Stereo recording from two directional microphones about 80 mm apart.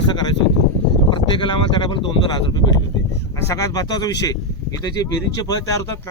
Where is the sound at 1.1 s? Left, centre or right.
Left.